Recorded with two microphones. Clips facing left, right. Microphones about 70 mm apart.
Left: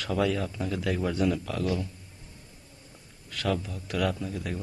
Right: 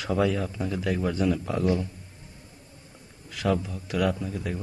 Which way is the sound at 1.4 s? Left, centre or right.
Right.